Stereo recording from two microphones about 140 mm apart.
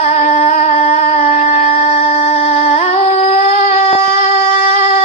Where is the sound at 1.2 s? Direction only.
80° left.